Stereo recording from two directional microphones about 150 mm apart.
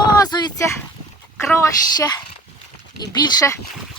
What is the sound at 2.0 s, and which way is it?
Speech, 30° left (ahead or behind).